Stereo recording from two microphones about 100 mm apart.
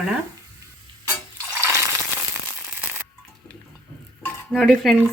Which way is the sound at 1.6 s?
30° right (ahead or behind).